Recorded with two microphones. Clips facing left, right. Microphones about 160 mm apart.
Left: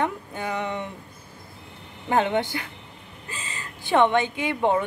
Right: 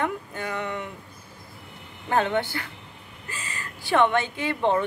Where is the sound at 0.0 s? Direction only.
20° left (ahead or behind).